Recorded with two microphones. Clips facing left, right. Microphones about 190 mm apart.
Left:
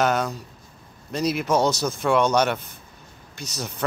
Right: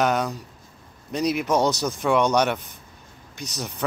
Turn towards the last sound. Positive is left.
turn(degrees=-15)  # may be behind; listen again after turning